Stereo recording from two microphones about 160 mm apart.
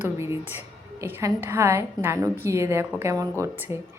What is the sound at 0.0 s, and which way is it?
A woman's voice, 15° right (ahead or behind).